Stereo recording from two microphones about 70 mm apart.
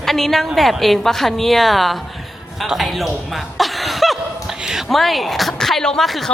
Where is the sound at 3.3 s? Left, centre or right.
Centre.